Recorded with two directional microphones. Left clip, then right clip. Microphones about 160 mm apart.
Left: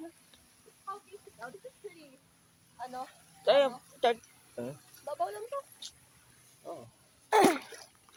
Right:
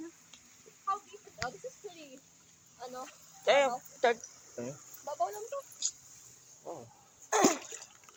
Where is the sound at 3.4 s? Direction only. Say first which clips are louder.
Left 1 dB; 10° left (ahead or behind).